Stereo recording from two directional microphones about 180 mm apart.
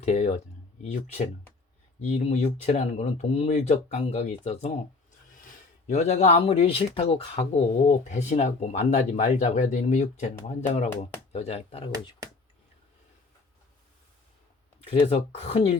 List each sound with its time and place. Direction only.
0.0 s speech: 40° left (ahead or behind)
5.9 s speech: 40° left (ahead or behind)
14.8 s speech: 35° left (ahead or behind)